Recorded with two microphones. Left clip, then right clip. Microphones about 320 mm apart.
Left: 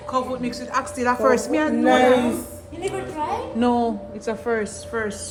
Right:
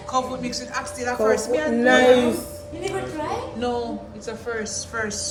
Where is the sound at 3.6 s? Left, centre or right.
Centre.